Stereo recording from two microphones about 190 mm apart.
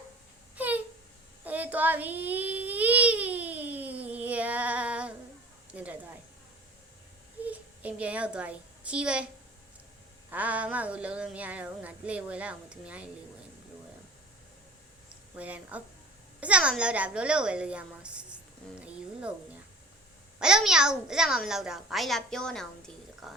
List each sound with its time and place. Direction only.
0.5 s a sound: 10° right (ahead or behind)
1.5 s baby cry: 10° right (ahead or behind)
5.7 s a woman's voice: 5° right (ahead or behind)
7.4 s a child's voice: 10° right (ahead or behind)
10.3 s speech: 10° right (ahead or behind)
15.4 s a child's voice: 5° right (ahead or behind)
20.4 s a child's voice: 5° right (ahead or behind)